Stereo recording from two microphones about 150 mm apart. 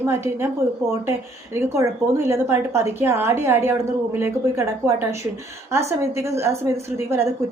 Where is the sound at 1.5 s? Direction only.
15° right (ahead or behind).